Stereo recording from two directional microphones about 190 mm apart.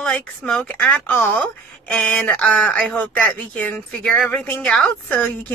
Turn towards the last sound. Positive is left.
turn(degrees=5)  # may be behind; listen again after turning